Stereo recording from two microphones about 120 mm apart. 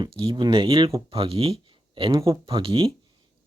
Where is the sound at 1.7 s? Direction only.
50° right (ahead or behind).